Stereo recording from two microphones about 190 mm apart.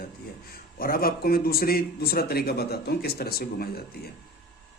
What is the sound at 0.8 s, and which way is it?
A man's voice, 50° left (ahead or behind).